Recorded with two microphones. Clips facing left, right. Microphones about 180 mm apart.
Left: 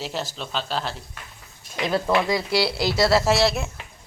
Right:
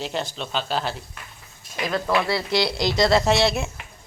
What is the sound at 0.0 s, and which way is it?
Speech, 5° left (ahead or behind).